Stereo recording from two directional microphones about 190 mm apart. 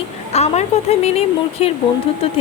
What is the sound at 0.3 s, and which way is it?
A woman's voice, 35° left (ahead or behind).